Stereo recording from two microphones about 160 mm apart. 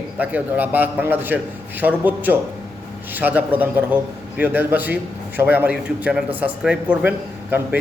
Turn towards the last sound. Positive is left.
turn(degrees=-10)  # may be behind; listen again after turning